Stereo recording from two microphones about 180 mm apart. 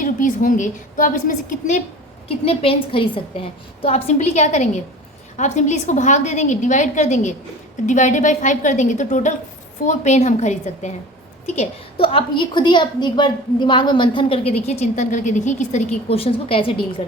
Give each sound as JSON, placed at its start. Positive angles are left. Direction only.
{"t": 0.0, "sound": "a woman's voice", "side_deg": 45}
{"t": 2.2, "sound": "a woman's voice", "side_deg": 30}